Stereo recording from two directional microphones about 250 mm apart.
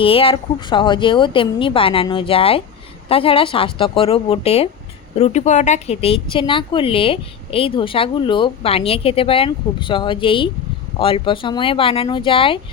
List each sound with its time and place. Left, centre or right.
0.0 s speech: left